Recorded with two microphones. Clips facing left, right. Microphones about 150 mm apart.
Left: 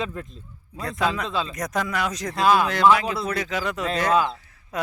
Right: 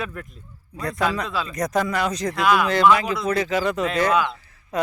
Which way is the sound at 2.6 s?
Centre (ahead or behind).